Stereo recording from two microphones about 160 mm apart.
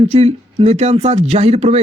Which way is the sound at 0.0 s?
40° right (ahead or behind).